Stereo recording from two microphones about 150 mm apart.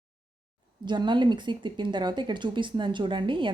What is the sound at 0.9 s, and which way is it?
Speech, 30° right (ahead or behind).